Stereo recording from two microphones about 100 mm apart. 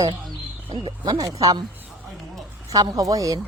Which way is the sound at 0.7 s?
50° right (ahead or behind).